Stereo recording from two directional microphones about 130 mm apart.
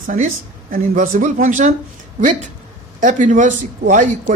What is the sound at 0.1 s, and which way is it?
Speech, 65° right (ahead or behind).